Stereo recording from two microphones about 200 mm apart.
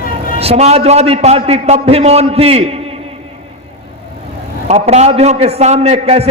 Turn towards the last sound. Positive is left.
turn(degrees=-30)  # may be behind; listen again after turning